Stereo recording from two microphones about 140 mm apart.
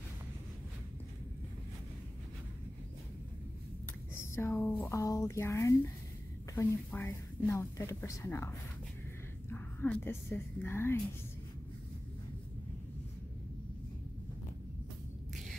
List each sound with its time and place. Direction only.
4.1 s speech: 15° left (ahead or behind)
6.9 s a woman's voice: 15° left (ahead or behind)